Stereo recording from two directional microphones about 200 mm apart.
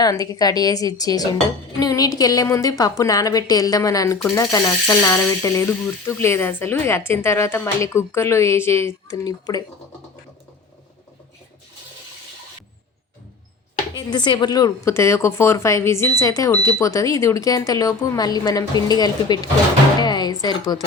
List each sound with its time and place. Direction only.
0.0 s a woman's voice: 20° left (ahead or behind)
13.9 s a woman's voice: 20° left (ahead or behind)
20.0 s music: 20° left (ahead or behind)
20.4 s a woman's voice: 20° left (ahead or behind)